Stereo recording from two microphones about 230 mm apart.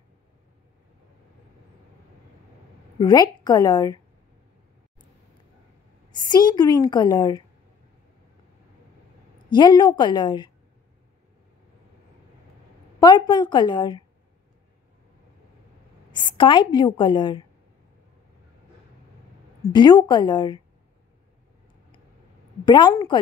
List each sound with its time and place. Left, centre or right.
3.0 s a woman's voice: centre
6.1 s a woman's voice: centre
9.5 s a woman's voice: centre
13.0 s a woman's voice: centre
16.1 s a woman's voice: centre
19.7 s a woman's voice: centre
22.7 s a woman's voice: centre